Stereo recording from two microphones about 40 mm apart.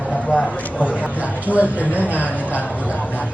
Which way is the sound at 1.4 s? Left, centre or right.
Right.